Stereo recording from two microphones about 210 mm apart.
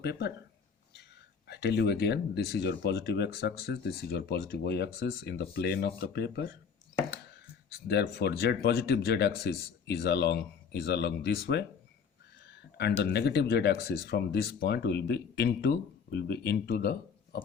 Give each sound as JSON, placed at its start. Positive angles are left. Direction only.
{"t": 0.0, "sound": "speech", "side_deg": 50}
{"t": 1.5, "sound": "speech", "side_deg": 50}
{"t": 7.7, "sound": "speech", "side_deg": 50}
{"t": 12.5, "sound": "a sound", "side_deg": 50}
{"t": 13.0, "sound": "speech", "side_deg": 50}